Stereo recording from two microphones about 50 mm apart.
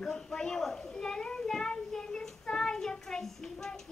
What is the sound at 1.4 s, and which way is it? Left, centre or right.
Child singing, centre.